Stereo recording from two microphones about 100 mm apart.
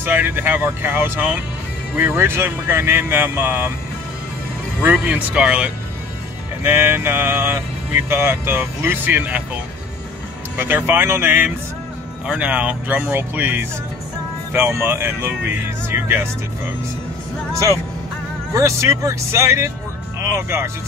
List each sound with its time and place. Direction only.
0.0 s vehicle: 20° right (ahead or behind)
5.0 s speech: 10° right (ahead or behind)
6.6 s vehicle: 25° right (ahead or behind)
10.6 s vehicle: 25° right (ahead or behind)
12.3 s speech: 15° right (ahead or behind)
13.1 s vehicle: 20° right (ahead or behind)
18.5 s vehicle: 30° right (ahead or behind)